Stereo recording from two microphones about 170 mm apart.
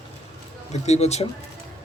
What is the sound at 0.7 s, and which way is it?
Speech, 40° left (ahead or behind).